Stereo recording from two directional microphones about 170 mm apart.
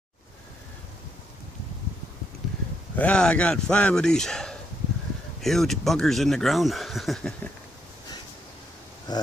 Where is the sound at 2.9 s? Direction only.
10° left (ahead or behind).